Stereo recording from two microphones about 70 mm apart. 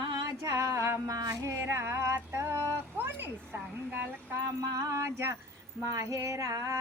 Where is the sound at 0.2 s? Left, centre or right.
Right.